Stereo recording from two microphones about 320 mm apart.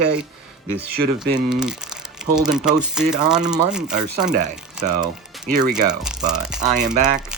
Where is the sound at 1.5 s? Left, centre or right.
Centre.